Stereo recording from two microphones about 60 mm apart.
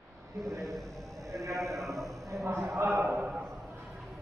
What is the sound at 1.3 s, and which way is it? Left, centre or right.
Sheep, right.